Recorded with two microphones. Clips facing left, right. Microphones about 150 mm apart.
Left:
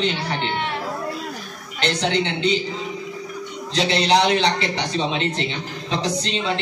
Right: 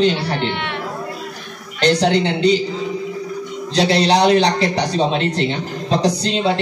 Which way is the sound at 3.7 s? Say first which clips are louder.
Right 4 dB; 40° right (ahead or behind).